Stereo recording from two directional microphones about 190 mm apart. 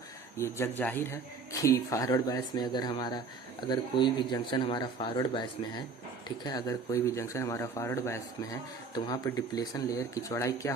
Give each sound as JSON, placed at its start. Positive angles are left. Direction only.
{"t": 0.3, "sound": "speech", "side_deg": 15}